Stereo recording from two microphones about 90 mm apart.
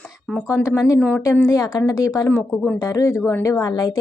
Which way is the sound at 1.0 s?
10° left (ahead or behind).